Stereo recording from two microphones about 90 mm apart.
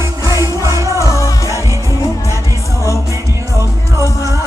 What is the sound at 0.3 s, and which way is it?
Music, 35° right (ahead or behind).